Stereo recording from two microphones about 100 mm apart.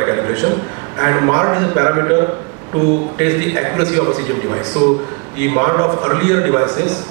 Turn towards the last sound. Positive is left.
turn(degrees=-30)  # may be behind; listen again after turning